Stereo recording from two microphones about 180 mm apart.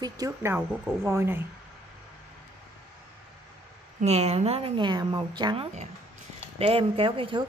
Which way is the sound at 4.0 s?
35° right (ahead or behind).